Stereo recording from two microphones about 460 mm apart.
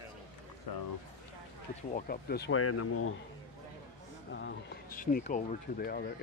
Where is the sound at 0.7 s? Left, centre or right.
Left.